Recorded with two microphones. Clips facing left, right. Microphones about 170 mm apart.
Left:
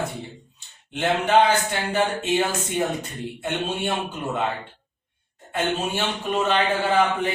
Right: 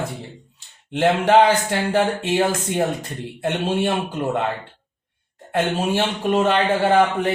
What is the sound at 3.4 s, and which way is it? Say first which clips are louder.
Speech: right 6 dB; 90° right.